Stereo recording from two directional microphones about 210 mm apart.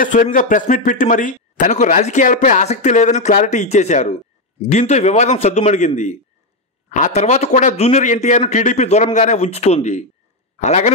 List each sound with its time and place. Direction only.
0.0 s speech: 40° left (ahead or behind)